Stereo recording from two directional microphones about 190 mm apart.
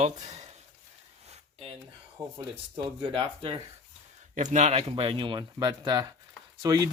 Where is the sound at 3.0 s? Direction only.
30° right (ahead or behind).